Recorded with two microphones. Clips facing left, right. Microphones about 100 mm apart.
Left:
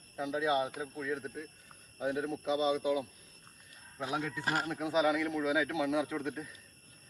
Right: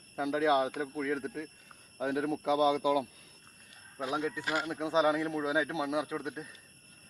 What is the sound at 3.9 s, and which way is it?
Speech, 20° right (ahead or behind).